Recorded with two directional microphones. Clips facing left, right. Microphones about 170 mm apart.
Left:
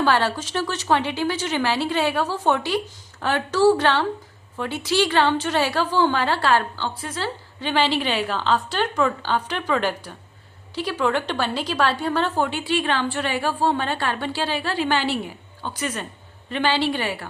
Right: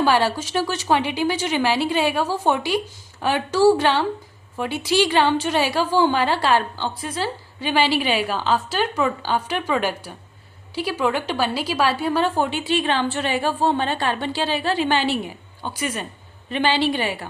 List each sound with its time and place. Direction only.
0.0 s a woman's voice: 10° right (ahead or behind)